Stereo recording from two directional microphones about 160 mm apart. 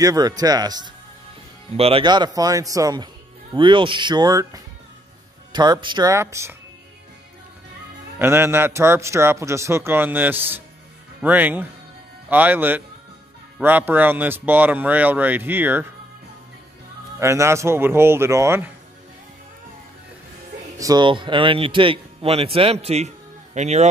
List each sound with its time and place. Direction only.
0.0 s speech: 25° right (ahead or behind)
1.8 s speech: 35° right (ahead or behind); by 6.5 s 15° right (ahead or behind)
8.2 s a man's voice: 15° right (ahead or behind)
17.2 s a man's voice: 15° right (ahead or behind)
20.7 s speech: 25° right (ahead or behind); by 23.9 s 45° right (ahead or behind)